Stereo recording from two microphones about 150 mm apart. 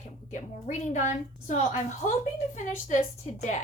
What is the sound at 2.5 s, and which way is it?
A woman's voice, 55° left (ahead or behind).